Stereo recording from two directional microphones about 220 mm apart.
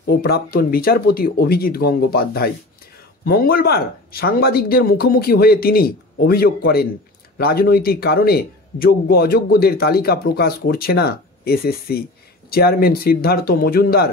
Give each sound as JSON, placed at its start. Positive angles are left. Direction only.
{"t": 0.0, "sound": "a man's voice", "side_deg": 45}